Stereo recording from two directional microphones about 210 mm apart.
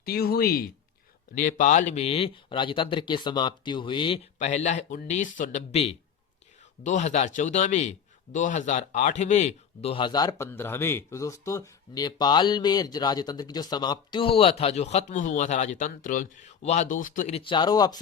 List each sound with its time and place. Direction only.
0.0 s a man's voice: 45° left (ahead or behind); by 18.0 s 20° left (ahead or behind)